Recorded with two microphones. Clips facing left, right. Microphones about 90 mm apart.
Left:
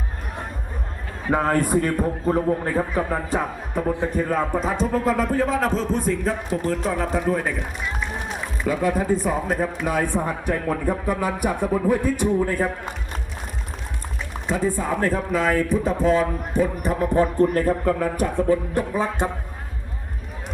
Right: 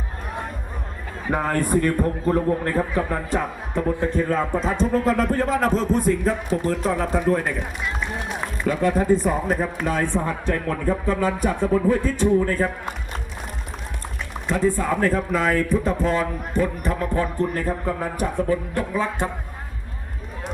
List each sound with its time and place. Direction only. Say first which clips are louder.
1.3 s speech: left 2 dB; 25° left (ahead or behind)
2.0 s a man's voice: right 1 dB; 5° left (ahead or behind)
8.6 s speech: right 2 dB; 5° left (ahead or behind)
14.4 s a man's voice: right 2 dB; 5° left (ahead or behind)
17.3 s music: left 5 dB; 45° left (ahead or behind)
18.7 s speech: left 1 dB; 20° left (ahead or behind)